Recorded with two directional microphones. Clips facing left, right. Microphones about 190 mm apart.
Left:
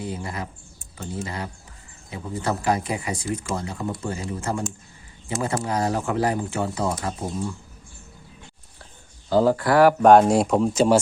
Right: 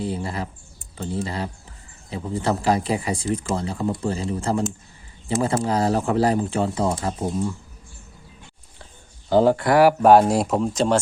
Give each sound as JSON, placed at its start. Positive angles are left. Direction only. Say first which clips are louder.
{"t": 0.1, "sound": "speech", "louder": "right 3 dB", "side_deg": -30}
{"t": 9.3, "sound": "speech", "louder": "right 2 dB", "side_deg": -25}
{"t": 9.7, "sound": "speech", "louder": "even", "side_deg": -10}